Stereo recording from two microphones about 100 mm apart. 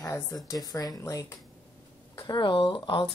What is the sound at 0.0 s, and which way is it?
A woman's voice, 30° left (ahead or behind).